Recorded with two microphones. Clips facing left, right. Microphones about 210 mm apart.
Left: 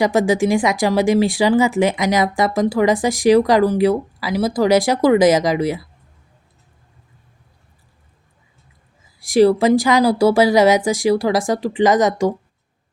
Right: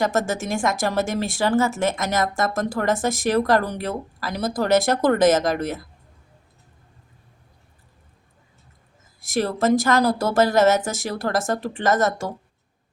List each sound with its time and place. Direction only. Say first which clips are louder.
0.0 s speech: left 7 dB; 15° left (ahead or behind)
9.3 s speech: left 7 dB; 10° left (ahead or behind)